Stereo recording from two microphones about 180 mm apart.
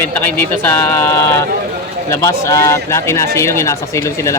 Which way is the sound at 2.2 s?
15° left (ahead or behind).